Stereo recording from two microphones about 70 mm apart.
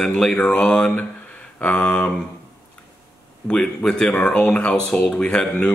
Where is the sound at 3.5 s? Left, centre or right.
Centre.